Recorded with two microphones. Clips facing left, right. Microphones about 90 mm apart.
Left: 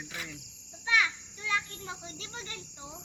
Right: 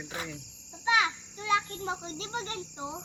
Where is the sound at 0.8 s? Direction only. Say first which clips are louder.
Right 3 dB; 25° right (ahead or behind).